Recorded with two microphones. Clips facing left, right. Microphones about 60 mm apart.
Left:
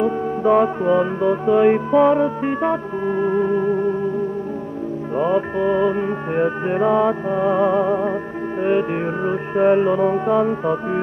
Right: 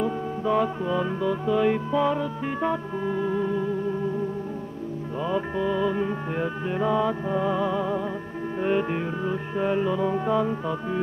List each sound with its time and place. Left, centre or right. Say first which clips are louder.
0.0 s music: left 8 dB; left
5.1 s music: left 8 dB; left
9.0 s music: left 7 dB; left